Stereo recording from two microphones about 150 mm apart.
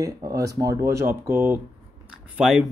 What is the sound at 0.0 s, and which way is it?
Speech, 25° right (ahead or behind).